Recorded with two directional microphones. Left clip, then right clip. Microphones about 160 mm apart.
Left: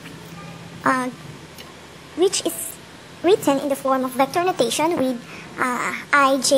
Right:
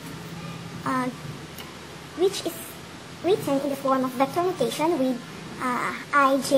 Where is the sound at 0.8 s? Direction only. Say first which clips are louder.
Left 7 dB; 40° left (ahead or behind).